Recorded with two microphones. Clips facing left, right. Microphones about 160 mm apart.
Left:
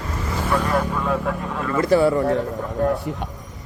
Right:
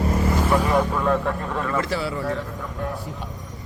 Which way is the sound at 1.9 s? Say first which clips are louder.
Left 10 dB; 50° left (ahead or behind).